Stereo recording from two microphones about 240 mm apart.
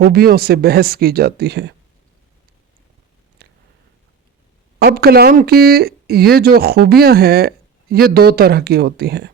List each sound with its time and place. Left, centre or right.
0.0 s speech: right
3.4 s a sound: right
4.8 s speech: right